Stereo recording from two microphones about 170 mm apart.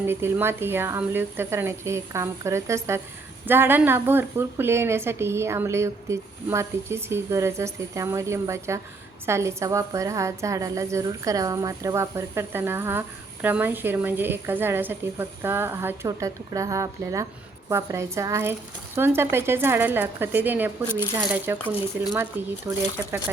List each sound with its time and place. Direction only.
0.0 s a woman's voice: 15° right (ahead or behind)